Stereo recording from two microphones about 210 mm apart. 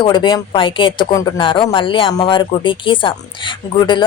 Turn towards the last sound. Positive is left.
turn(degrees=20)  # may be behind; listen again after turning